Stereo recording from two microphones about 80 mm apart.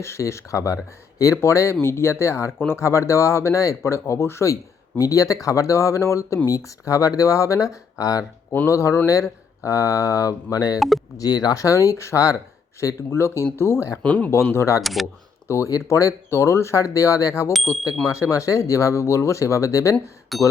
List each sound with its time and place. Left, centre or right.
0.0 s speech: left
4.9 s speech: left
8.4 s speech: left
10.8 s speech: centre
11.2 s speech: left
14.0 s speech: centre
14.4 s speech: left
14.8 s speech: centre
15.4 s speech: left
17.5 s speech: centre
18.1 s speech: left
20.3 s speech: centre